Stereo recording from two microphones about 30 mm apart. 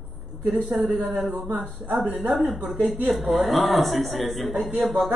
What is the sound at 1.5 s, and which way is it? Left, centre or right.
Speech, right.